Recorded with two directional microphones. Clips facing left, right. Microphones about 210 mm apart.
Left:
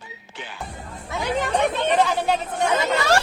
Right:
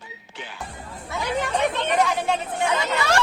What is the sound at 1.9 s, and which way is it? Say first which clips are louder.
Speech: left 2 dB; 30° left (ahead or behind).